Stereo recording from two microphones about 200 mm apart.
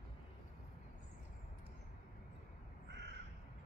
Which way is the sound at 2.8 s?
60° right (ahead or behind).